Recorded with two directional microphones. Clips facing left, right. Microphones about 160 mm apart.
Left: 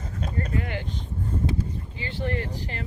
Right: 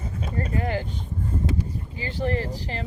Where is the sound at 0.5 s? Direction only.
35° right (ahead or behind).